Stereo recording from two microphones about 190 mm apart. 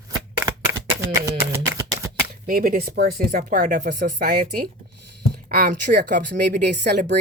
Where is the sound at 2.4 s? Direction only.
45° right (ahead or behind).